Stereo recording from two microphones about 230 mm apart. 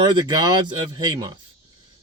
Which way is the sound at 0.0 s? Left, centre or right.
Centre.